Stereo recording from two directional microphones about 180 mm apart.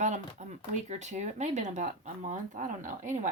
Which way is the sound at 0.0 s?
40° right (ahead or behind).